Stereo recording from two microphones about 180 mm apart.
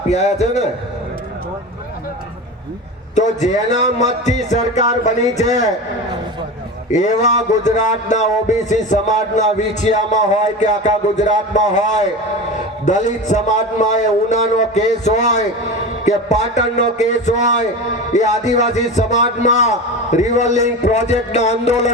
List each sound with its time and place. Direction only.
0.1 s a man's voice: 35° left (ahead or behind)
3.2 s a man's voice: 40° left (ahead or behind)
6.9 s a man's voice: 40° left (ahead or behind)